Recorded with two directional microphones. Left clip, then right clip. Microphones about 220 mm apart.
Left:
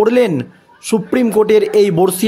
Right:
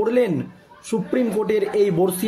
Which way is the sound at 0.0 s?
45° left (ahead or behind).